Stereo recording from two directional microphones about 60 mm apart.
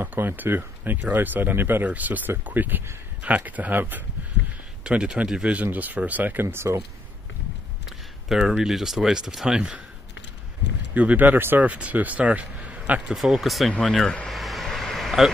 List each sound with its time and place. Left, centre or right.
0.0 s speech: right
4.8 s speech: centre
5.6 s speech: right
6.4 s speech: right
8.3 s speech: centre
11.0 s speech: right
13.1 s speech: centre
13.7 s speech: centre
14.3 s vehicle: centre